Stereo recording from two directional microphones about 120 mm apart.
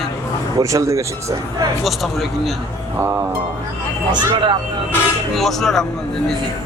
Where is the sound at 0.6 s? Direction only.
25° right (ahead or behind).